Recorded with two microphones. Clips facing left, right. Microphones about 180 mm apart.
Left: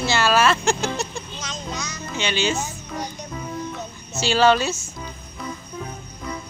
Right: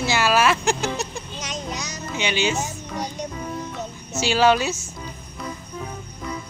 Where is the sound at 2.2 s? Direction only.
15° right (ahead or behind).